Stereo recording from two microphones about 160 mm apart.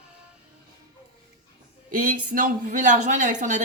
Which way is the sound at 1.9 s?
60° right (ahead or behind).